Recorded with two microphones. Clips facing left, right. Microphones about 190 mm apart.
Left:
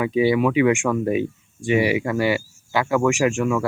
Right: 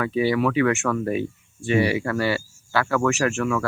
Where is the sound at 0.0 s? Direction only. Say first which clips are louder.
Left 3 dB; 15° left (ahead or behind).